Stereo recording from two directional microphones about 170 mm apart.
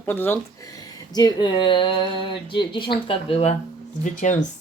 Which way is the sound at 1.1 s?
25° left (ahead or behind).